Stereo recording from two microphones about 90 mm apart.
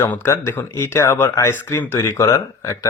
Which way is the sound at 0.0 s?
25° left (ahead or behind).